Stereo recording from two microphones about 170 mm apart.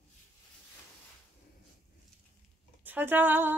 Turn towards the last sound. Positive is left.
turn(degrees=-10)  # may be behind; listen again after turning